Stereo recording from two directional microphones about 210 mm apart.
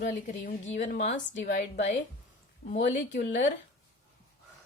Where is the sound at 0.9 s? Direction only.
60° left (ahead or behind).